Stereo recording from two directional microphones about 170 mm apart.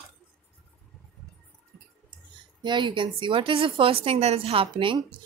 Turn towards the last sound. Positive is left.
turn(degrees=-30)  # may be behind; listen again after turning